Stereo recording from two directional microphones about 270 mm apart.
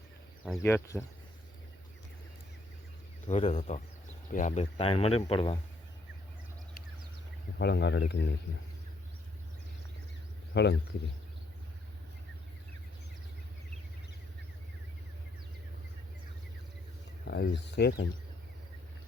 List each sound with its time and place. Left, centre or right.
0.4 s speech: centre
3.2 s speech: left
7.6 s speech: left
10.5 s speech: left
17.2 s speech: left